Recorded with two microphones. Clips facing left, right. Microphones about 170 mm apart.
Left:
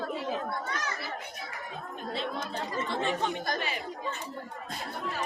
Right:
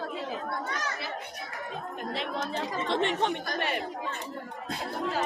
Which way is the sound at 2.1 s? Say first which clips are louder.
Right 1 dB; 80° right.